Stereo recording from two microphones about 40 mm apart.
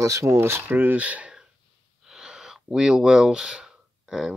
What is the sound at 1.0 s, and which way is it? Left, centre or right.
Speech, right.